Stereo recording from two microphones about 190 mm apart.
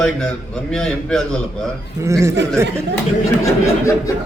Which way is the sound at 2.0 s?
15° right (ahead or behind).